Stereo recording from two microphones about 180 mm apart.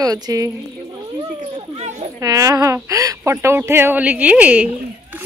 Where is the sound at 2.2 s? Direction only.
20° right (ahead or behind).